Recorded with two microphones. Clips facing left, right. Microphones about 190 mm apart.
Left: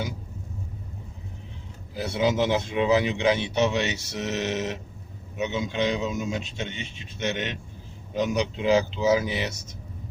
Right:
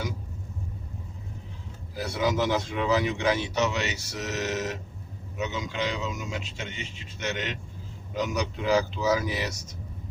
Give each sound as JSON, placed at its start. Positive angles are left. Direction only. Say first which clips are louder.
{"t": 2.0, "sound": "a man's voice", "louder": "left 3 dB", "side_deg": 20}